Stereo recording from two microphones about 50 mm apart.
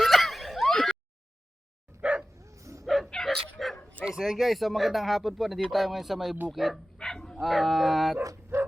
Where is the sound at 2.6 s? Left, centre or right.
Right.